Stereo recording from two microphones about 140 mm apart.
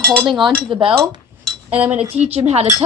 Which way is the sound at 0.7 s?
35° right (ahead or behind).